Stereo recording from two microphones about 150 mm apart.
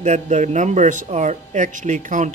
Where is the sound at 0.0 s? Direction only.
50° right (ahead or behind).